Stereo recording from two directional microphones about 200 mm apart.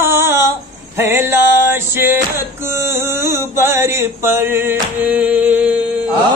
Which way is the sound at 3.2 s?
15° right (ahead or behind).